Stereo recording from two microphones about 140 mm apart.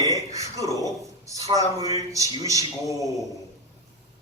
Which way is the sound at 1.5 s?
25° left (ahead or behind).